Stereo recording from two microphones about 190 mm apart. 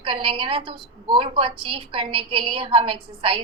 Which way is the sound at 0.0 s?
30° right (ahead or behind).